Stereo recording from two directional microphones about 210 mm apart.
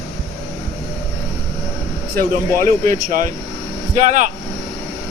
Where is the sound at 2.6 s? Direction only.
40° right (ahead or behind).